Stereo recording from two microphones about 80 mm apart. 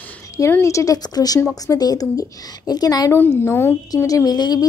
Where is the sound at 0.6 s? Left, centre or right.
Left.